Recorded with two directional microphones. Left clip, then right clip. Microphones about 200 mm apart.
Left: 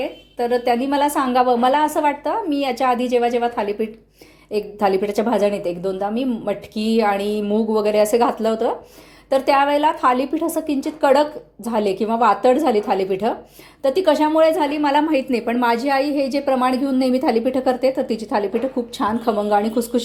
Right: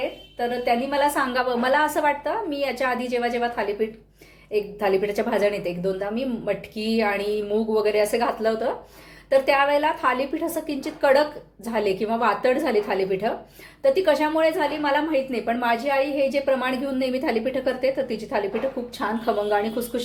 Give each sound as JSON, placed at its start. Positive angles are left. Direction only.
{"t": 0.3, "sound": "a woman's voice", "side_deg": 45}